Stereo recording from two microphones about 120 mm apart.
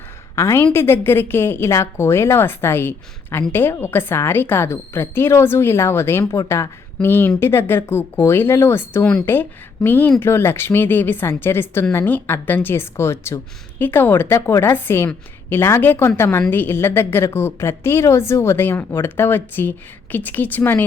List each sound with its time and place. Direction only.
0.3 s a woman's voice: 25° left (ahead or behind)